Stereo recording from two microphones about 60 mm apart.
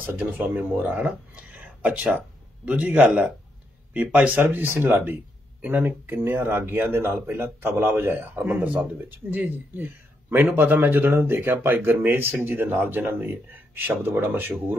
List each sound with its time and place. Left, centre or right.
0.0 s a man's voice: right